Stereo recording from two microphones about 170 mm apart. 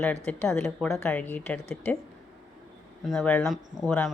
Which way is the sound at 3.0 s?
5° left (ahead or behind).